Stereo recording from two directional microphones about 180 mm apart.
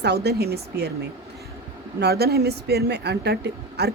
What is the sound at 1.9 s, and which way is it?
Speech, 65° right (ahead or behind).